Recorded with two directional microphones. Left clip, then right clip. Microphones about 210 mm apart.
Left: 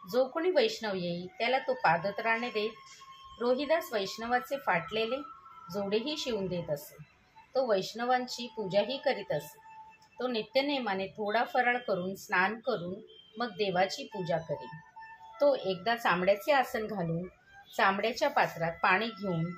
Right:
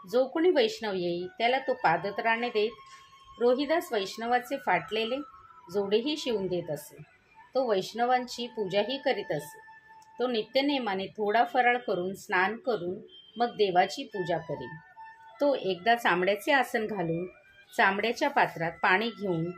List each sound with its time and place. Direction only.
0.1 s speech: 35° right (ahead or behind)